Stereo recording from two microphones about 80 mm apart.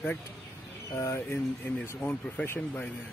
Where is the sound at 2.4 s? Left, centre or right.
Left.